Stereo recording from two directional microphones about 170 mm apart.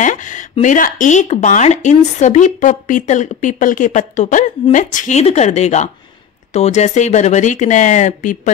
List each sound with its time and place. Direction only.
0.0 s speech: 50° left (ahead or behind)